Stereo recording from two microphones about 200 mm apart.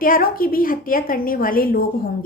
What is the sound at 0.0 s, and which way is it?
A woman's voice, 45° left (ahead or behind).